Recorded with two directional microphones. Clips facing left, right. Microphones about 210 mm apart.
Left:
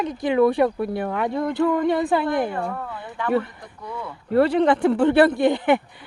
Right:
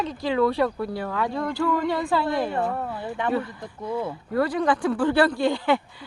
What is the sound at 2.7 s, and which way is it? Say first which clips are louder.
Speech: right 3 dB; 25° right (ahead or behind).